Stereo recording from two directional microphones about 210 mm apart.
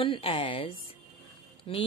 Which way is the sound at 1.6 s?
25° left (ahead or behind).